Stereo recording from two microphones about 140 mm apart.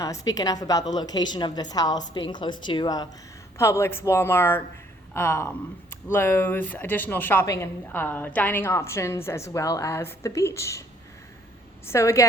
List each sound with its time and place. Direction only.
0.0 s a woman's voice: 25° left (ahead or behind)
3.6 s a woman's voice: 20° left (ahead or behind)
11.9 s a woman's voice: 20° left (ahead or behind)